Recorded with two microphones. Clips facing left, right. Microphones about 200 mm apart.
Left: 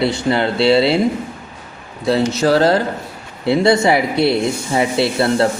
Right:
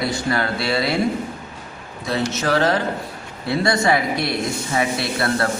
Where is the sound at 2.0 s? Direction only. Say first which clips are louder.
Left 7 dB; 30° left (ahead or behind).